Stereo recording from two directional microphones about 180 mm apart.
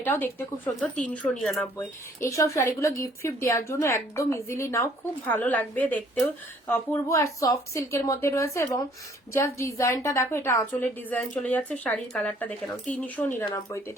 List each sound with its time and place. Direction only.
0.0 s a woman's voice: 10° left (ahead or behind)
2.2 s a woman's voice: 15° left (ahead or behind)